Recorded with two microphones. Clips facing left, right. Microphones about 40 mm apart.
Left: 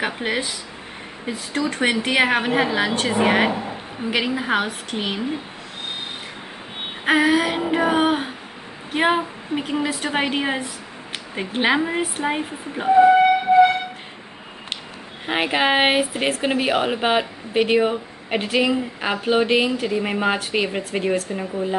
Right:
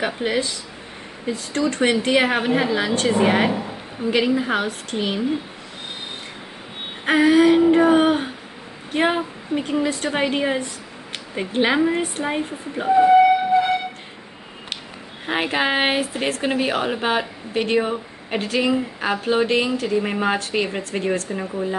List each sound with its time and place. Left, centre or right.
0.0 s a woman's voice: centre
7.1 s a woman's voice: centre
15.2 s a woman's voice: centre
21.3 s speech: centre